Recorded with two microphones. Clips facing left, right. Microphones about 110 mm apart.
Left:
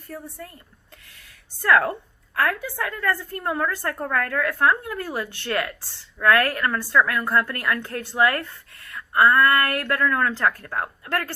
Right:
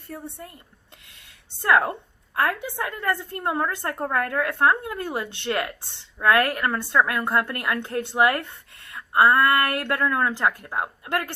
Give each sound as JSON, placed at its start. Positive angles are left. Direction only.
{"t": 0.1, "sound": "a woman's voice", "side_deg": -25}